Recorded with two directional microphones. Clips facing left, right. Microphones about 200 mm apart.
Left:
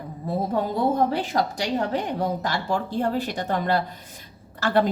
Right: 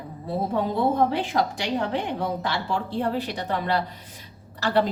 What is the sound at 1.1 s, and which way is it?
A woman's voice, 40° left (ahead or behind).